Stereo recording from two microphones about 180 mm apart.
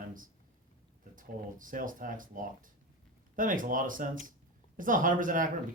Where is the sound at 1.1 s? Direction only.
50° right (ahead or behind).